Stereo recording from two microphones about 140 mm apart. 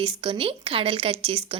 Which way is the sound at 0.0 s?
40° right (ahead or behind).